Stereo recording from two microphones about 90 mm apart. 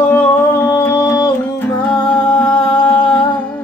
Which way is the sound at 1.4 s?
20° left (ahead or behind).